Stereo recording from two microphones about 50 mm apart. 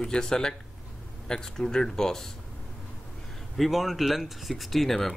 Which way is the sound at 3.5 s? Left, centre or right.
Centre.